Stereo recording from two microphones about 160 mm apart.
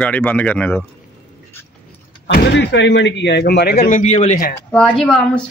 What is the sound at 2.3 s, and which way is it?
Speech, 90° left.